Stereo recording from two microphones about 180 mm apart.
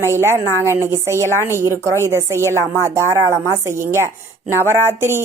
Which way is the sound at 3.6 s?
15° right (ahead or behind).